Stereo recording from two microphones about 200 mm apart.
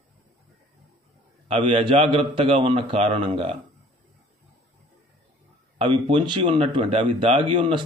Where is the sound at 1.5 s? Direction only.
25° right (ahead or behind).